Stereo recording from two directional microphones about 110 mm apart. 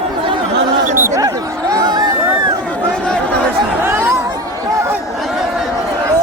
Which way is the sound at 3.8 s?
25° right (ahead or behind).